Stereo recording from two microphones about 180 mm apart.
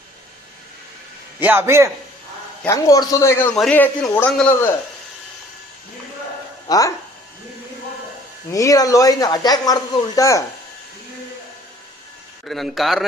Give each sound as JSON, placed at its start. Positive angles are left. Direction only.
{"t": 1.4, "sound": "a man's voice", "side_deg": -10}
{"t": 2.6, "sound": "speech", "side_deg": 20}
{"t": 6.7, "sound": "speech", "side_deg": 20}
{"t": 8.5, "sound": "speech", "side_deg": 20}
{"t": 12.4, "sound": "a man's voice", "side_deg": 0}